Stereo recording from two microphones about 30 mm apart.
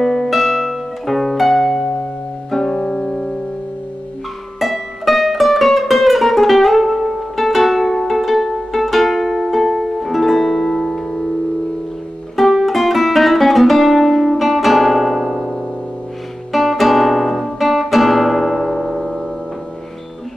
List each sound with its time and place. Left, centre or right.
0.0 s music: centre
0.3 s music: centre
1.5 s harp: centre
2.5 s music: centre
2.8 s music: left
4.6 s music: centre
12.4 s music: centre
16.5 s guitar: centre